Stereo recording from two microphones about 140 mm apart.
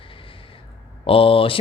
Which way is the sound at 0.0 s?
40° left (ahead or behind).